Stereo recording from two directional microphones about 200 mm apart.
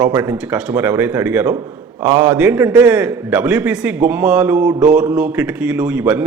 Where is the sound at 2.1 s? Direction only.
15° right (ahead or behind).